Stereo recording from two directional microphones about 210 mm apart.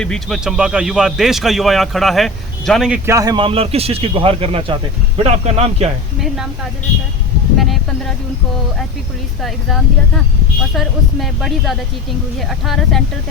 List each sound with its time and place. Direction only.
0.0 s speech: centre (ahead or behind)
3.2 s speech: 20° right (ahead or behind)
6.1 s speech: centre (ahead or behind)
7.6 s speech: centre (ahead or behind)
9.4 s speech: centre (ahead or behind)